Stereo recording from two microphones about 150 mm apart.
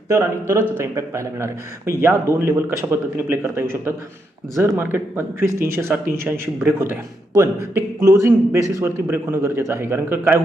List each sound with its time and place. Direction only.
0.1 s speech: 20° right (ahead or behind)